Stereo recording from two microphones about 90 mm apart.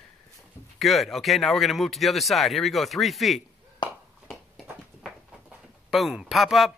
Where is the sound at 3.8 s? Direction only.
55° left (ahead or behind).